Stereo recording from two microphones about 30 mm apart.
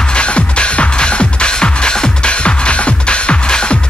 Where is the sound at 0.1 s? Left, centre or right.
Left.